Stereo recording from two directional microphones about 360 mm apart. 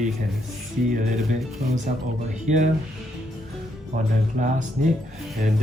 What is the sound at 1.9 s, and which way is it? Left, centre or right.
Speech, right.